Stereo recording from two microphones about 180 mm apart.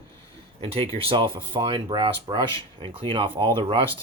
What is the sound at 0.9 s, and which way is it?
Speech, 30° right (ahead or behind).